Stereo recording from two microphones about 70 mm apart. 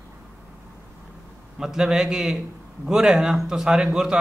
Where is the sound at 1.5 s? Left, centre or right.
Centre.